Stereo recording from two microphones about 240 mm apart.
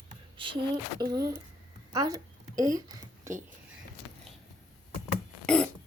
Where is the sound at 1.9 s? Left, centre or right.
Centre.